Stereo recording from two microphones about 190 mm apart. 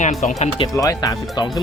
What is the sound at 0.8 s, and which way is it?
Speech, 20° left (ahead or behind).